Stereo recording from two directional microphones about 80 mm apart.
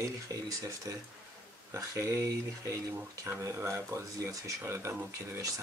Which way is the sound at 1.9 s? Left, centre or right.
Right.